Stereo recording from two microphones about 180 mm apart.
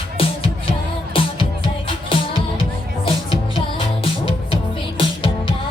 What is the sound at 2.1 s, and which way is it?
Music, 30° left (ahead or behind).